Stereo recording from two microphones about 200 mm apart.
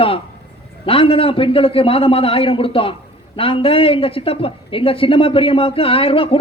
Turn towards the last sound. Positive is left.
turn(degrees=30)  # may be behind; listen again after turning